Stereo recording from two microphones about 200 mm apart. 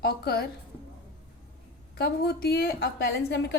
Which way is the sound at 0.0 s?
50° left (ahead or behind).